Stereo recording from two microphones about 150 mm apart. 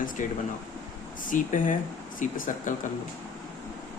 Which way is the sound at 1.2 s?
60° left (ahead or behind).